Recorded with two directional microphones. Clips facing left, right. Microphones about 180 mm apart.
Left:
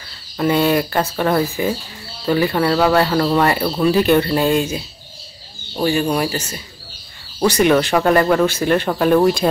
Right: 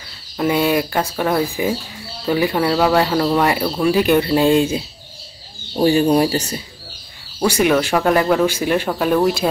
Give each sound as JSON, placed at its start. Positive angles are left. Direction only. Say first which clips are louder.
{"t": 0.4, "sound": "speech", "louder": "left 1 dB", "side_deg": -10}
{"t": 4.5, "sound": "speech", "louder": "right 3 dB", "side_deg": -30}
{"t": 5.8, "sound": "speech", "louder": "right 4 dB", "side_deg": -30}
{"t": 7.4, "sound": "speech", "louder": "left 2 dB", "side_deg": -5}